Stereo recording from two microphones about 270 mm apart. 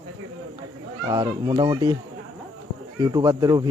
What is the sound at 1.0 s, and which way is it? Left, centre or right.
Speech, centre.